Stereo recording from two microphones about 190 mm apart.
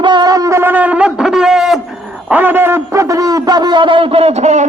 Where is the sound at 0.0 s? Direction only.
25° right (ahead or behind).